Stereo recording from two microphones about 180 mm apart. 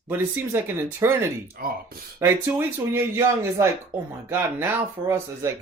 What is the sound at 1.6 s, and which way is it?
Mantra, 55° right (ahead or behind).